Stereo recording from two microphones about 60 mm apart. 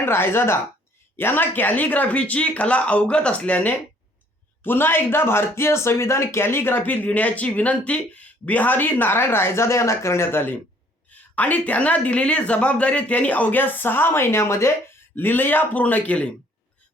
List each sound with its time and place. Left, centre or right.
0.0 s speech: left
4.6 s speech: left
11.1 s speech: left
15.1 s speech: left